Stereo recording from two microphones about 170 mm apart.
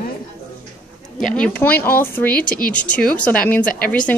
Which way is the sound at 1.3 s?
5° left (ahead or behind).